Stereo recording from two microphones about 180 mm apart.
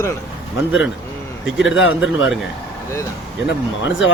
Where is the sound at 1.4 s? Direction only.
5° right (ahead or behind).